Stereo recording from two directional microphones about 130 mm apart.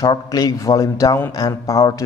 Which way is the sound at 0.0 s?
30° left (ahead or behind).